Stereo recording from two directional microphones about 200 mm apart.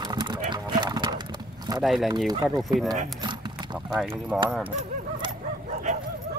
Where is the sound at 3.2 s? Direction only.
20° right (ahead or behind).